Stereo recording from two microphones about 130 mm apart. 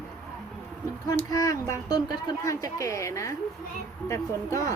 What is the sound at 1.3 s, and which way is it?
Speech, 25° left (ahead or behind).